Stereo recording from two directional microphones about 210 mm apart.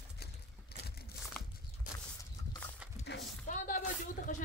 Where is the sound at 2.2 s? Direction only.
10° left (ahead or behind).